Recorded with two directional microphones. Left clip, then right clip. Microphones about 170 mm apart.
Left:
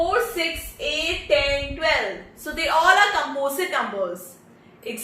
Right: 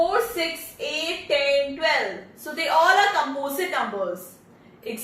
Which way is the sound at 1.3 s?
15° left (ahead or behind).